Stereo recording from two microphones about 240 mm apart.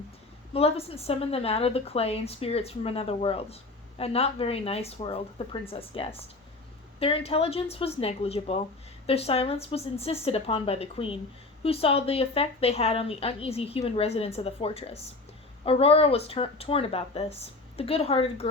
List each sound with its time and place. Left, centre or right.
0.5 s a woman's voice: left